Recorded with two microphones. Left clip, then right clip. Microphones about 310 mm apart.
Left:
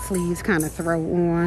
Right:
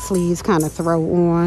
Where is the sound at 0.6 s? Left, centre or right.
Left.